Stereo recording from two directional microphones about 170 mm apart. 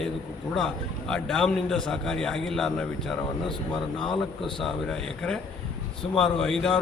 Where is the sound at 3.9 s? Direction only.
30° left (ahead or behind).